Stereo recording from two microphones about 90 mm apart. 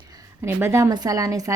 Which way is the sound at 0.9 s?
40° right (ahead or behind).